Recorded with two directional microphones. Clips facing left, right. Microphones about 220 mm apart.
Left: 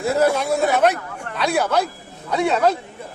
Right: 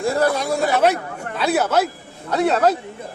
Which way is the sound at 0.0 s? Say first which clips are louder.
Left 1 dB; 5° left (ahead or behind).